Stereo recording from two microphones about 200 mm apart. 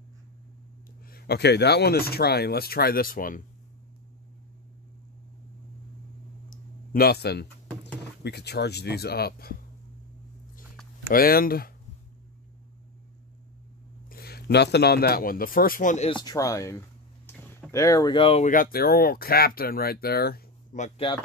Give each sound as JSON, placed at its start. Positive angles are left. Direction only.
{"t": 1.0, "sound": "speech", "side_deg": 50}
{"t": 6.5, "sound": "clicking", "side_deg": 45}
{"t": 7.8, "sound": "speech", "side_deg": 55}
{"t": 11.1, "sound": "speech", "side_deg": 45}
{"t": 14.0, "sound": "speech", "side_deg": 50}
{"t": 16.1, "sound": "speech", "side_deg": 20}
{"t": 18.5, "sound": "speech", "side_deg": 45}